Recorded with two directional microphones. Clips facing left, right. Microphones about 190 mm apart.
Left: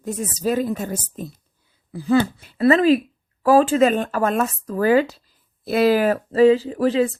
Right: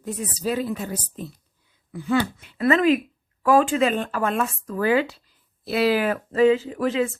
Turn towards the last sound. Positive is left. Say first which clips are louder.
# left 4 dB
turn(degrees=35)  # may be behind; listen again after turning